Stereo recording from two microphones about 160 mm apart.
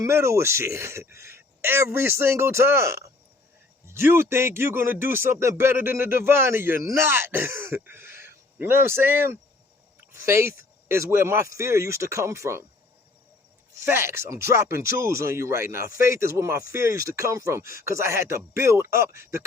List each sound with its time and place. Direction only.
0.0 s speech: 15° right (ahead or behind)
13.7 s speech: 15° right (ahead or behind)